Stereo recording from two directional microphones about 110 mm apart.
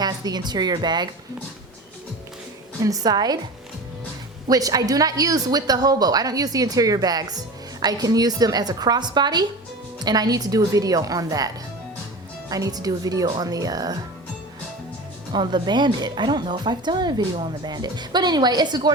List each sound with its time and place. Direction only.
0.0 s speech: 40° right (ahead or behind)
2.8 s a woman's voice: 35° right (ahead or behind)
4.4 s a woman's voice: 35° right (ahead or behind)
15.3 s a woman's voice: 40° right (ahead or behind)